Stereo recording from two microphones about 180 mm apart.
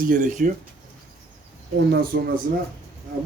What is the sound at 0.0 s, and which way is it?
Speech, 45° right (ahead or behind).